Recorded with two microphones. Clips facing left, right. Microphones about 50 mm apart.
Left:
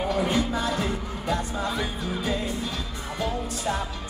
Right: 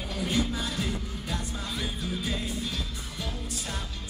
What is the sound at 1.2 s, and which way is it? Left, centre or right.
Music, left.